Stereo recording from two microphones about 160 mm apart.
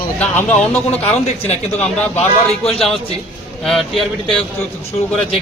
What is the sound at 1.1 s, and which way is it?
Speech, 40° left (ahead or behind).